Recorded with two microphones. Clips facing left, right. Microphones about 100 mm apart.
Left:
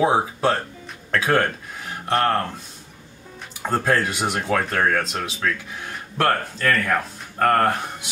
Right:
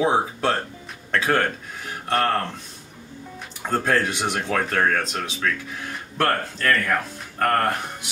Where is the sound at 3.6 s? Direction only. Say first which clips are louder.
Left 1 dB; 5° left (ahead or behind).